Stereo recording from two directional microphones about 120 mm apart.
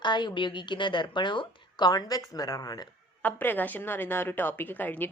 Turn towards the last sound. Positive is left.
turn(degrees=15)  # may be behind; listen again after turning